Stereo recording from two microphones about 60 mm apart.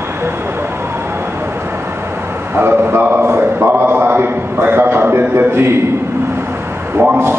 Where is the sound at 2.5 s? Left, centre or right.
Right.